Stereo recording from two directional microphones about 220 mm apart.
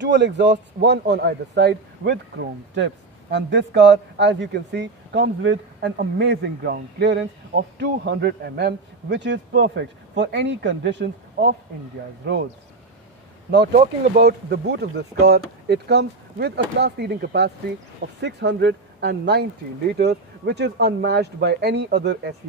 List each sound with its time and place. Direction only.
0.0 s a man's voice: 55° right (ahead or behind)
13.5 s a man's voice: 50° right (ahead or behind)